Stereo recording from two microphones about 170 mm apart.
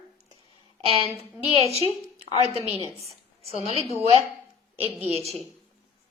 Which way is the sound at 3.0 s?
35° right (ahead or behind).